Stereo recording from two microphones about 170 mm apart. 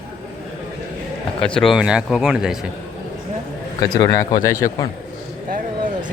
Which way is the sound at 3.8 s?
25° left (ahead or behind).